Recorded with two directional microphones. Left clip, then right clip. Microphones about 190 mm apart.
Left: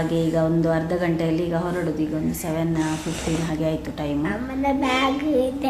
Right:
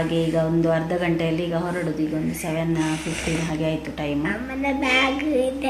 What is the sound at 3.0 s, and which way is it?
Speech, 15° left (ahead or behind).